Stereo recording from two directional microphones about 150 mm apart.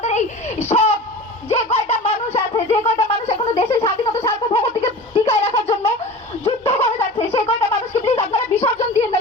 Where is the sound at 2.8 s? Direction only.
45° left (ahead or behind).